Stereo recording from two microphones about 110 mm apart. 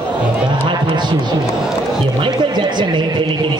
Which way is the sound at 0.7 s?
45° right (ahead or behind).